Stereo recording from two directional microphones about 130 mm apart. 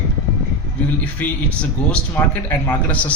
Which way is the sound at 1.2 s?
10° left (ahead or behind).